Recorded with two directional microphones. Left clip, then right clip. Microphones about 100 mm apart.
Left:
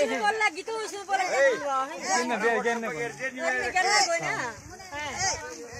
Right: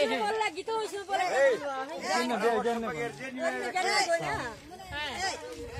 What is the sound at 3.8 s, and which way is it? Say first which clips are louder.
Speech: left 4 dB; 10° right (ahead or behind).